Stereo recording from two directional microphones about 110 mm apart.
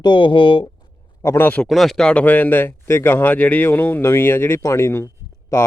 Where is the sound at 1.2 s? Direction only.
20° left (ahead or behind).